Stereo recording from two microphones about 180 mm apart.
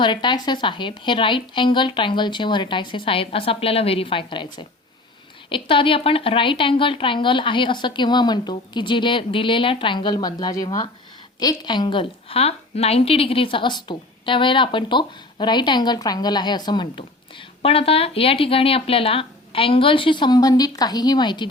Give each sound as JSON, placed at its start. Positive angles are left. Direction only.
{"t": 0.0, "sound": "a woman's voice", "side_deg": 25}
{"t": 5.5, "sound": "a woman's voice", "side_deg": 30}